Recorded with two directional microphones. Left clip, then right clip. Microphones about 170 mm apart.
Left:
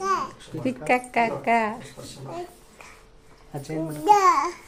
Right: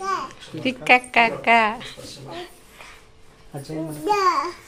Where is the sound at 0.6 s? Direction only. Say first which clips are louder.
Right 6 dB; 5° left (ahead or behind).